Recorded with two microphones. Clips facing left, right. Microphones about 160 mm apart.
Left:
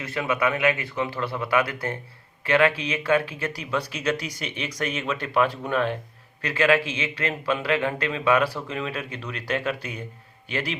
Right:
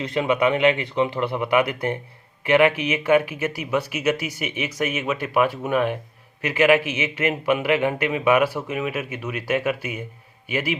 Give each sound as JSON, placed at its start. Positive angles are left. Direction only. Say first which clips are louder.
{"t": 0.0, "sound": "a man's voice", "louder": "right 5 dB", "side_deg": -20}